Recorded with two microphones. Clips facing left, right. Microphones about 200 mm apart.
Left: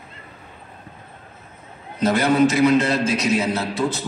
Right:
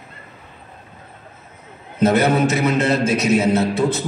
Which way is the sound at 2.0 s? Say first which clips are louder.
Right 1 dB; 25° right (ahead or behind).